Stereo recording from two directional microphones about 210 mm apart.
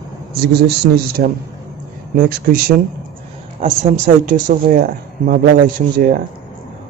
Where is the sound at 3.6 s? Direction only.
35° right (ahead or behind).